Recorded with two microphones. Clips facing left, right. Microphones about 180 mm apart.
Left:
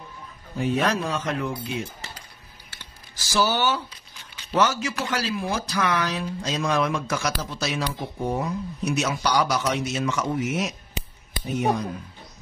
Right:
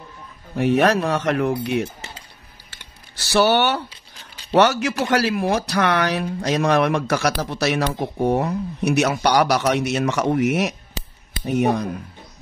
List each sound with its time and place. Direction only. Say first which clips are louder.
0.6 s speech: right 6 dB; 70° right (ahead or behind)
3.2 s speech: right 6 dB; 65° right (ahead or behind)